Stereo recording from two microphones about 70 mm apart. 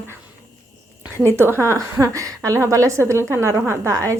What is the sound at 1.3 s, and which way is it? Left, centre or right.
A woman's voice, right.